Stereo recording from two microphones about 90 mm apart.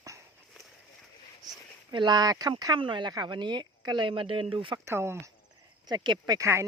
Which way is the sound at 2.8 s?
65° right (ahead or behind).